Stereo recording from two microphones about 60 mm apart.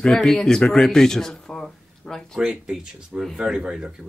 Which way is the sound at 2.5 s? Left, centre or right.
Centre.